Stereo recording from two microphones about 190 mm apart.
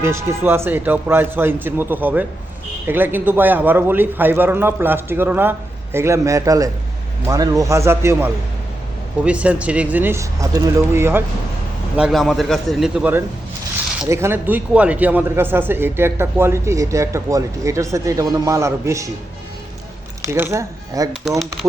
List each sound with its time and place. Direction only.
0.0 s a man's voice: 15° right (ahead or behind)
11.9 s a man's voice: centre (ahead or behind)
20.2 s a man's voice: 15° right (ahead or behind)
21.1 s a man's voice: centre (ahead or behind)